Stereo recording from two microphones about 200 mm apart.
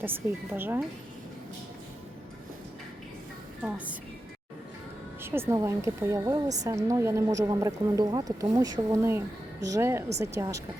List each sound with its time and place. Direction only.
0.0 s speech: 10° right (ahead or behind)
3.6 s a woman's voice: 5° right (ahead or behind)
5.2 s speech: 10° right (ahead or behind)